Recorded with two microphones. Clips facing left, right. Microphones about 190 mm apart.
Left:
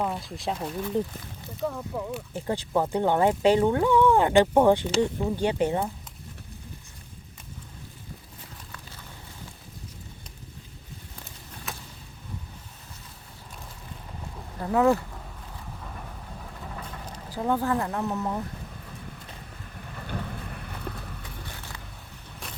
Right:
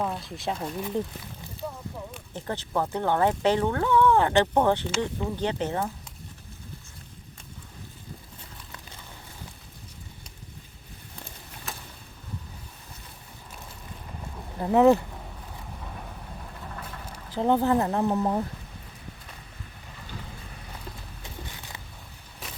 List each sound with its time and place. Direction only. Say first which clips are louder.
0.0 s speech: left 1 dB; 5° left (ahead or behind)
2.1 s speech: left 4 dB; 10° left (ahead or behind)
11.7 s vehicle: left 1 dB; centre (ahead or behind)
14.6 s speech: right 3 dB; 20° right (ahead or behind)
17.3 s speech: right 4 dB; 25° right (ahead or behind)
20.0 s vehicle: left 7 dB; 60° left (ahead or behind)